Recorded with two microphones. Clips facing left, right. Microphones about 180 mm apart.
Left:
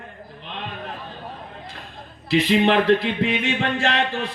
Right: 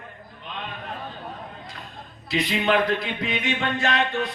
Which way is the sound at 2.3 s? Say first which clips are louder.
Left 5 dB; 30° left (ahead or behind).